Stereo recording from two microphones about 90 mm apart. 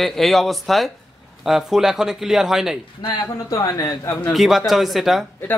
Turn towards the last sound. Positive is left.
turn(degrees=20)  # may be behind; listen again after turning